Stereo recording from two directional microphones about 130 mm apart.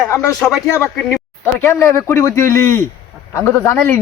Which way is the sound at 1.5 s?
20° left (ahead or behind).